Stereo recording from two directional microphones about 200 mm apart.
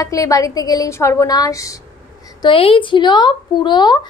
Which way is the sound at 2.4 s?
25° left (ahead or behind).